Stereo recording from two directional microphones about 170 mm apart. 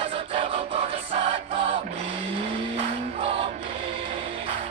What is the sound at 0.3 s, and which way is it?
Music, 40° right (ahead or behind).